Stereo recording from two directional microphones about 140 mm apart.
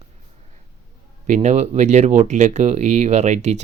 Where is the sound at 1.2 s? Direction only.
55° right (ahead or behind).